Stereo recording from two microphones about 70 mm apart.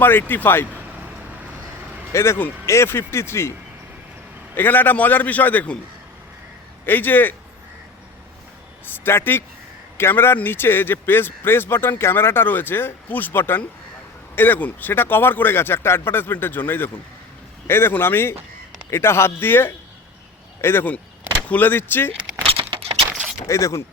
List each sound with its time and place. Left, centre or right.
0.0 s speech: left
2.1 s speech: left
4.5 s a man's voice: left
6.8 s a man's voice: left
9.0 s a man's voice: left
22.2 s keys jangling: centre
23.5 s speech: left